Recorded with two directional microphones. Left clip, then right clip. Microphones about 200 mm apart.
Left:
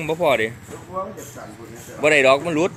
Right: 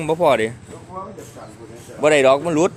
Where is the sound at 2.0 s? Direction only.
20° right (ahead or behind).